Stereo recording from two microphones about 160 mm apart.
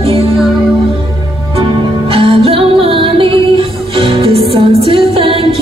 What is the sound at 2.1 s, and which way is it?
Music, 35° right (ahead or behind).